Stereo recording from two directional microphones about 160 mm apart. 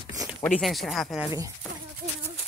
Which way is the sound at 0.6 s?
Centre (ahead or behind).